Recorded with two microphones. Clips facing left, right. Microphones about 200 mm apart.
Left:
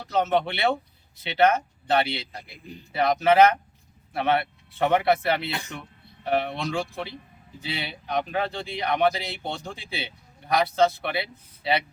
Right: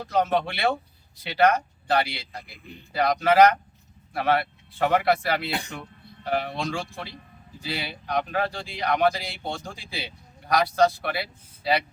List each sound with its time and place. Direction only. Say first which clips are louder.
0.2 s speech: even; 25° left (ahead or behind)